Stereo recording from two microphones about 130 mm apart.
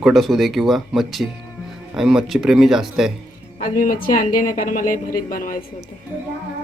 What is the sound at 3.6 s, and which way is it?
A woman's voice, 90° left.